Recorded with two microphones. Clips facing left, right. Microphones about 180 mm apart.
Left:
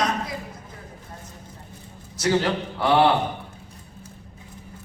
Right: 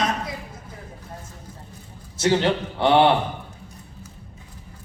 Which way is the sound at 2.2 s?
25° right (ahead or behind).